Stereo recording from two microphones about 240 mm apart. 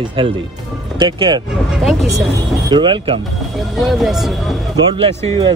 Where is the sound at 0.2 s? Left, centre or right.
Right.